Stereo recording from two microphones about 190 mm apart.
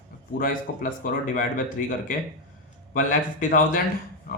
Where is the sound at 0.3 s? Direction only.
45° left (ahead or behind).